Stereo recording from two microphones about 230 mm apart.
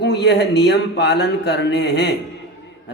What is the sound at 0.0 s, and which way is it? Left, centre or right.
Speech, left.